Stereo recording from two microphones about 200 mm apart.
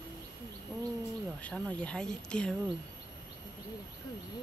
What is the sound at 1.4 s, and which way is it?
Speech, 5° left (ahead or behind).